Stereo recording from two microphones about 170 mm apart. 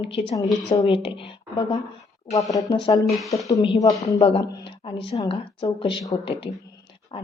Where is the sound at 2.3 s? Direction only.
20° left (ahead or behind).